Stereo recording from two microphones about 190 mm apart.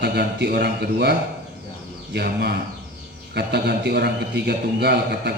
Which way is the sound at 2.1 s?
60° right (ahead or behind).